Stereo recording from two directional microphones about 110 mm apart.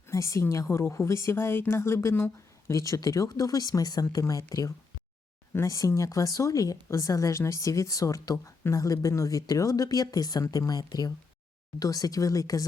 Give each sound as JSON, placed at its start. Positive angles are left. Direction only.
{"t": 0.1, "sound": "a woman's voice", "side_deg": 30}